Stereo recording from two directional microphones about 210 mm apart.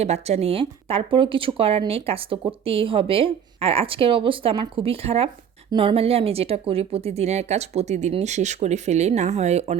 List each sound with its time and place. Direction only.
0.0 s speech: 30° right (ahead or behind)